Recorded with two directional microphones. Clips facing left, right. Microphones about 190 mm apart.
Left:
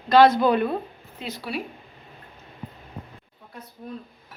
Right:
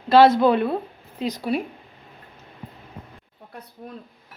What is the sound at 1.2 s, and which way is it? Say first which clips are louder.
Speech: right 7 dB; 45° right (ahead or behind).